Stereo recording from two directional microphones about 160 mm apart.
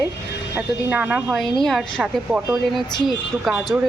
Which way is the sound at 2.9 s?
25° left (ahead or behind).